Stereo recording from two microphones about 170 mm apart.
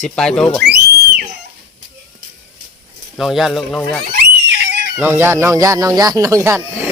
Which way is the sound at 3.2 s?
Centre (ahead or behind).